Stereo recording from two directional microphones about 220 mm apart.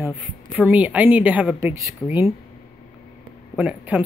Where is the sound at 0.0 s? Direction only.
5° right (ahead or behind).